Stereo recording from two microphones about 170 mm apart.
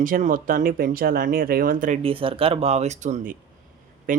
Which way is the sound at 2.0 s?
30° right (ahead or behind).